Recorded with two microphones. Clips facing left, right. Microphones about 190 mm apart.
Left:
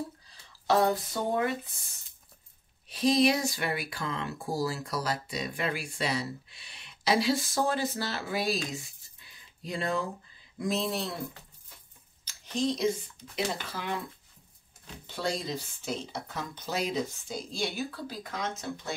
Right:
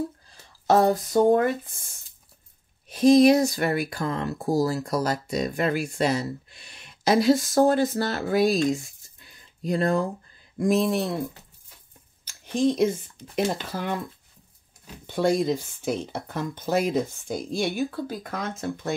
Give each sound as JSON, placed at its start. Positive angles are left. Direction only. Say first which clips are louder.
{"t": 0.3, "sound": "speech", "louder": "right 6 dB", "side_deg": -45}
{"t": 2.9, "sound": "speech", "louder": "right 9 dB", "side_deg": -45}
{"t": 8.7, "sound": "a sound", "louder": "right 4 dB", "side_deg": -45}
{"t": 10.6, "sound": "speech", "louder": "right 8 dB", "side_deg": -55}
{"t": 12.3, "sound": "speech", "louder": "right 7 dB", "side_deg": -50}
{"t": 15.0, "sound": "speech", "louder": "right 11 dB", "side_deg": -50}